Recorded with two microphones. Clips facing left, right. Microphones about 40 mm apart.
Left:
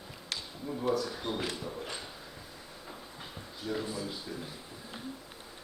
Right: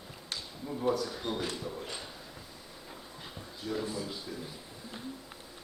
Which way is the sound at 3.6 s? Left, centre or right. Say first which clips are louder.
Even; centre.